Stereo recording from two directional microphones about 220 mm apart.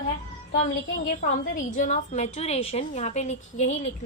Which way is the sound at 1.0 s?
35° left (ahead or behind).